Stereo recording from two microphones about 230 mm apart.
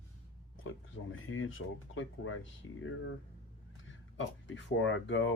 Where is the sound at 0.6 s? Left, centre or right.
Left.